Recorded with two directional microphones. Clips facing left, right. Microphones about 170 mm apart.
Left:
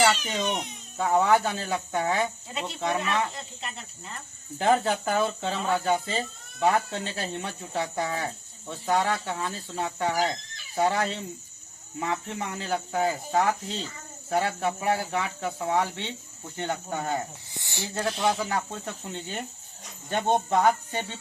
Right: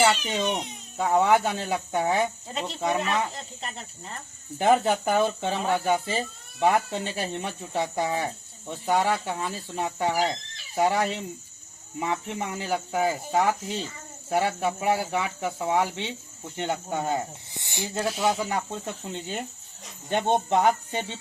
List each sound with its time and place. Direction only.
0.0 s speech: 15° right (ahead or behind)
2.5 s speech: 40° right (ahead or behind)
4.5 s speech: 20° right (ahead or behind)
12.3 s speech: 15° right (ahead or behind)
18.5 s speech: 20° right (ahead or behind)